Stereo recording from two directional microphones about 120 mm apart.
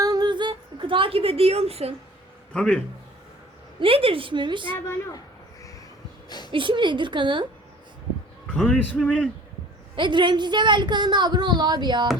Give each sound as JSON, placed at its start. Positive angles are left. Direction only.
{"t": 0.0, "sound": "a sound", "side_deg": -35}
{"t": 2.5, "sound": "a man's voice", "side_deg": 10}
{"t": 3.8, "sound": "a woman's voice", "side_deg": -50}
{"t": 6.2, "sound": "a sound", "side_deg": 35}
{"t": 6.5, "sound": "a woman's voice", "side_deg": -45}
{"t": 8.5, "sound": "speech", "side_deg": 5}
{"t": 9.9, "sound": "a woman's voice", "side_deg": -40}